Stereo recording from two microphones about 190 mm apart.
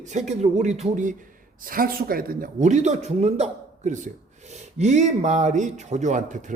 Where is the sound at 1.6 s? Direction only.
50° right (ahead or behind).